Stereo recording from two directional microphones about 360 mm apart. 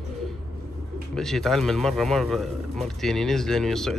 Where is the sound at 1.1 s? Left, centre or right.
Centre.